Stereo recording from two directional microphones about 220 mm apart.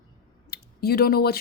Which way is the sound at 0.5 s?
45° left (ahead or behind).